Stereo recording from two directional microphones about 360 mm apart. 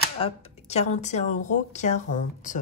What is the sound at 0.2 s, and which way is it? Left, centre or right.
Speech, centre.